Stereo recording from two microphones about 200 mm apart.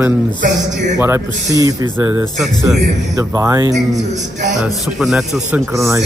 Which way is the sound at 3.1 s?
15° right (ahead or behind).